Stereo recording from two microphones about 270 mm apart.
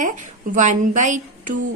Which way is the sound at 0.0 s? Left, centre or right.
Right.